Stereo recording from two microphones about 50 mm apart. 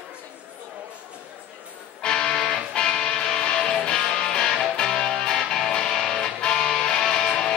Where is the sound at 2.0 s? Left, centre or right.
Centre.